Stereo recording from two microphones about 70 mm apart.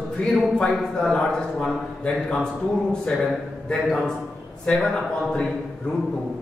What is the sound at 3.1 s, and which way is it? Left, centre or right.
A man's voice, centre.